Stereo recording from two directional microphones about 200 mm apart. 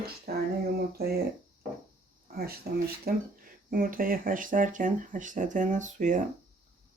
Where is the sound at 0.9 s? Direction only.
50° right (ahead or behind).